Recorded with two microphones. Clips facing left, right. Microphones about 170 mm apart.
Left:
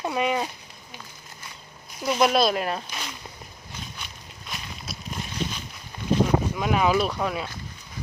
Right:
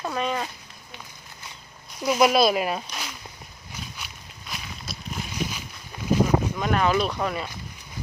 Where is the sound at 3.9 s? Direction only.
5° right (ahead or behind).